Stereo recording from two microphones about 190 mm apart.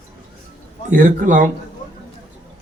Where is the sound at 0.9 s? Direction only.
45° right (ahead or behind).